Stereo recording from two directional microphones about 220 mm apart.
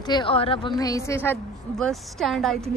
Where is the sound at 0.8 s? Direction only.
15° left (ahead or behind).